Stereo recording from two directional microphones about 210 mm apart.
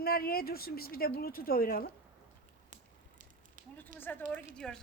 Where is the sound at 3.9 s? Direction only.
10° left (ahead or behind).